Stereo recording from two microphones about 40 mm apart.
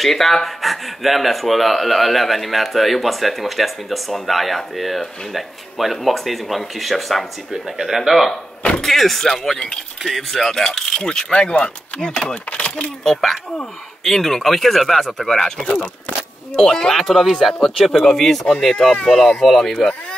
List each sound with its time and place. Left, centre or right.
0.0 s speech: centre
7.5 s speech: centre; by 12.4 s left
12.4 s speech: left
14.0 s speech: centre
15.6 s speech: left
16.5 s speech: centre
17.3 s speech: centre